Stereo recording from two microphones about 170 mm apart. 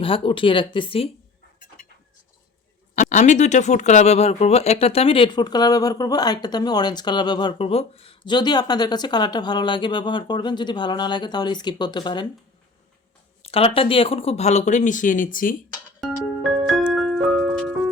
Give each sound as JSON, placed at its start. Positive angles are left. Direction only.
{"t": 0.0, "sound": "speech", "side_deg": 30}
{"t": 2.9, "sound": "speech", "side_deg": 45}
{"t": 13.4, "sound": "speech", "side_deg": 35}
{"t": 16.0, "sound": "music", "side_deg": 0}